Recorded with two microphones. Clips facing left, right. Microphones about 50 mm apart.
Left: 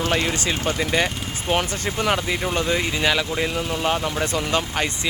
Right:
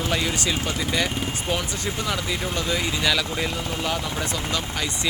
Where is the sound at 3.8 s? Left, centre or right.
Left.